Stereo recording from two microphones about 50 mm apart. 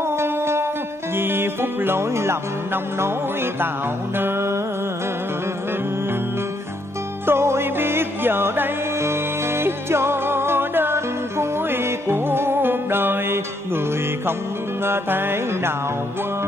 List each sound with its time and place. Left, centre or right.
0.2 s music: right
4.2 s music: right
7.2 s music: right
14.9 s music: right